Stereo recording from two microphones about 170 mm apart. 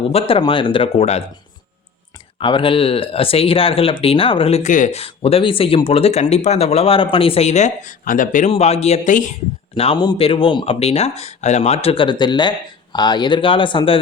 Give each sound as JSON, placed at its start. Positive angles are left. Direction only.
{"t": 0.1, "sound": "speech", "side_deg": 35}
{"t": 2.4, "sound": "speech", "side_deg": 30}
{"t": 9.7, "sound": "speech", "side_deg": 35}